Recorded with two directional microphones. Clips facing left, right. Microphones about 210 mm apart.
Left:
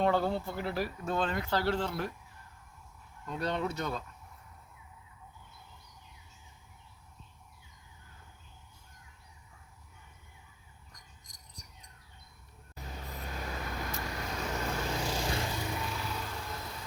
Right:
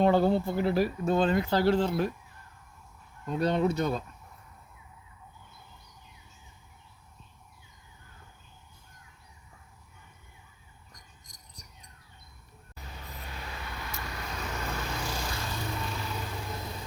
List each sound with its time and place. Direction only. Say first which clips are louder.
0.0 s speech: right 6 dB; 20° right (ahead or behind)
3.2 s speech: right 7 dB; 20° right (ahead or behind)
13.4 s vehicle: left 3 dB; 45° left (ahead or behind)
14.5 s vehicle: left 2 dB; 20° left (ahead or behind)
15.5 s vehicle: right 1 dB; 15° left (ahead or behind)
16.4 s vehicle: right 4 dB; 20° right (ahead or behind)